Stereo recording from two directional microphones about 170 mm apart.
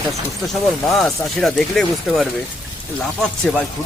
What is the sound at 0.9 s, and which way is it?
Speech, centre (ahead or behind).